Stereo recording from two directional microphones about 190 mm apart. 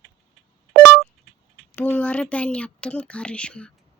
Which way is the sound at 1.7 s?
10° left (ahead or behind).